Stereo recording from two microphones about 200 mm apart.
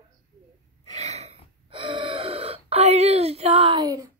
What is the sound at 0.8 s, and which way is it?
Gasp, 35° right (ahead or behind).